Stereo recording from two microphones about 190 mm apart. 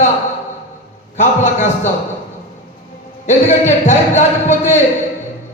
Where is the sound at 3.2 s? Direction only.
40° left (ahead or behind).